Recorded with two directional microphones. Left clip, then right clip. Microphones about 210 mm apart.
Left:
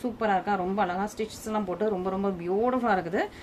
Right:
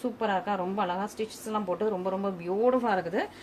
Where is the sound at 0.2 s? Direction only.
20° left (ahead or behind).